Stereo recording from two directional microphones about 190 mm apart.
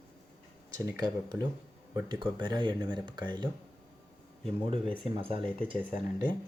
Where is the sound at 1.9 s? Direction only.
25° right (ahead or behind).